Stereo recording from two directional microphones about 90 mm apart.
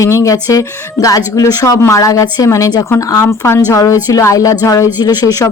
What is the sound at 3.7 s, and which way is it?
Speech, 40° left (ahead or behind).